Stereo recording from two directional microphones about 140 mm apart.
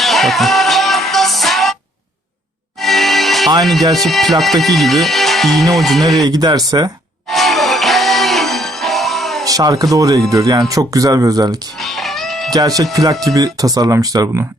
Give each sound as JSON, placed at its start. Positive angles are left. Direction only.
{"t": 0.0, "sound": "music", "side_deg": 0}
{"t": 2.8, "sound": "music", "side_deg": 0}
{"t": 3.6, "sound": "speech", "side_deg": 0}
{"t": 6.2, "sound": "speech", "side_deg": -30}
{"t": 7.3, "sound": "music", "side_deg": 0}
{"t": 9.4, "sound": "speech", "side_deg": -25}
{"t": 11.8, "sound": "music", "side_deg": 0}
{"t": 12.5, "sound": "speech", "side_deg": -25}